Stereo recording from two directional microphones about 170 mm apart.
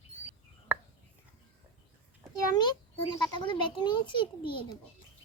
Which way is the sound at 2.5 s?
25° left (ahead or behind).